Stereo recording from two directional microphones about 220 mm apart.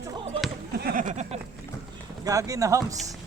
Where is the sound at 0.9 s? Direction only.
35° right (ahead or behind).